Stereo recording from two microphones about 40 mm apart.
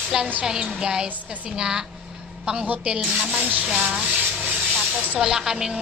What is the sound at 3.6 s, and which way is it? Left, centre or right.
Rub, right.